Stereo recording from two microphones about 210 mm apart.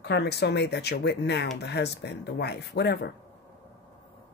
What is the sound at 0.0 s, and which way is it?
Speech, 55° left (ahead or behind).